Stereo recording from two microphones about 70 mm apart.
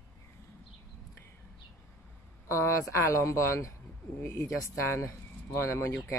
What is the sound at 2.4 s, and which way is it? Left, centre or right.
Speech, left.